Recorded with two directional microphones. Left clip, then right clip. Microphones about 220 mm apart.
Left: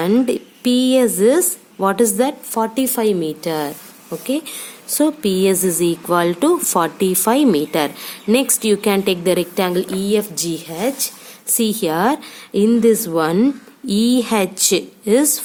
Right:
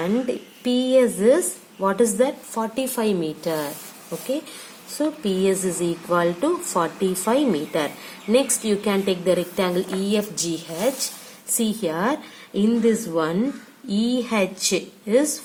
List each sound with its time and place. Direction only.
0.0 s speech: 50° left (ahead or behind)
4.9 s a woman's voice: 45° left (ahead or behind)